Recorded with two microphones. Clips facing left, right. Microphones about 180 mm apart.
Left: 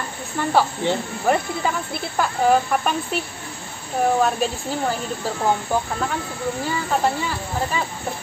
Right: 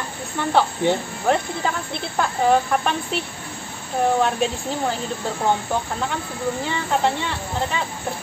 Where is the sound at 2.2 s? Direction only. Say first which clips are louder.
Even; 5° left (ahead or behind).